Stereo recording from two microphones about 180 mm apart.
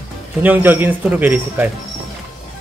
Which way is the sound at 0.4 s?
10° right (ahead or behind).